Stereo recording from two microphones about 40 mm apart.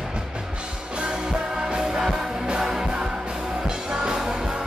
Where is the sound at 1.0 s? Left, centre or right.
Centre.